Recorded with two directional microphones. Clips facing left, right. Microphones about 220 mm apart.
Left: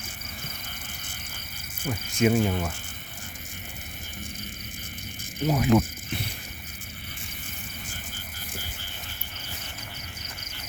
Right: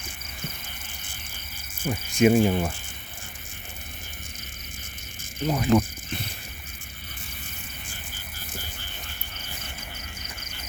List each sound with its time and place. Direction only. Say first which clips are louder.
1.8 s speech: right 4 dB; 15° right (ahead or behind)
5.4 s speech: even; 5° left (ahead or behind)